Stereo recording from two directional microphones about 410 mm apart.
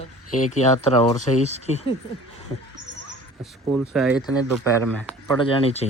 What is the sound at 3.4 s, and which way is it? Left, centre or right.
Speech, centre.